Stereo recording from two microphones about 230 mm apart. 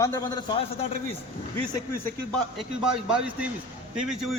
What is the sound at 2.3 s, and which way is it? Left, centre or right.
A man's voice, centre.